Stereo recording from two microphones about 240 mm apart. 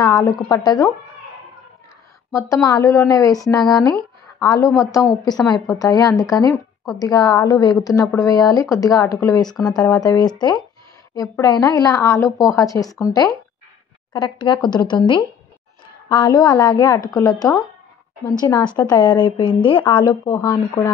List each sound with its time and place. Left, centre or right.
0.0 s speech: centre
2.3 s a woman's voice: centre
14.1 s speech: centre
17.1 s a woman's voice: centre
17.4 s a woman's voice: centre